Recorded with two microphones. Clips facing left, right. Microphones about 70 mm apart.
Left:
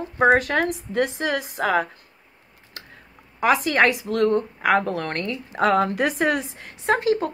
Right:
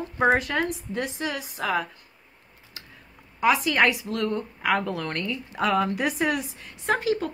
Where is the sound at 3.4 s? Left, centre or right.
Left.